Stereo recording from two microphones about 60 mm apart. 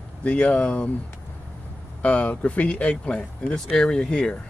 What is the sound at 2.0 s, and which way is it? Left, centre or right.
Speech, left.